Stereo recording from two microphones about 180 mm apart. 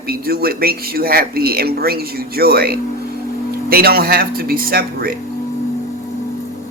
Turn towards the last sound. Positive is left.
turn(degrees=-55)  # may be behind; listen again after turning